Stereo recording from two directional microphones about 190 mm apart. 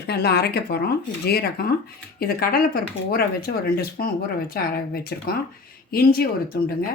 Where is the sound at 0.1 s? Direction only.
55° left (ahead or behind).